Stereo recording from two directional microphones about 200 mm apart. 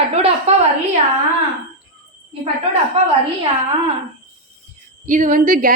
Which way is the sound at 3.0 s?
30° right (ahead or behind).